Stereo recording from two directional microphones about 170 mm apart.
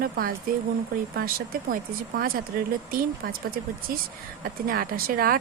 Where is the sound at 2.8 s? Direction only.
60° right (ahead or behind).